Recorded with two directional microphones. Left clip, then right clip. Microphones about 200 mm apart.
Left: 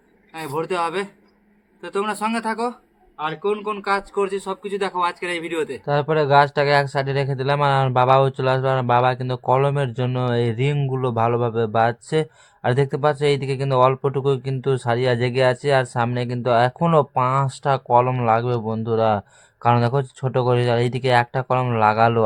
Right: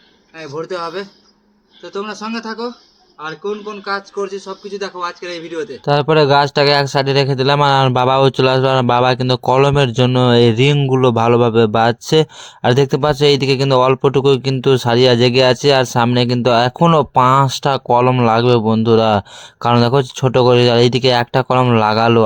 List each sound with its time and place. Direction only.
0.3 s a man's voice: 30° left (ahead or behind)
1.8 s a man's voice: 5° left (ahead or behind)
5.8 s speech: 40° right (ahead or behind)